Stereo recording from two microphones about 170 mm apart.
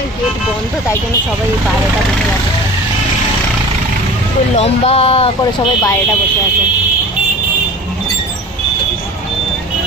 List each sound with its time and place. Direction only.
4.6 s speech: 35° left (ahead or behind)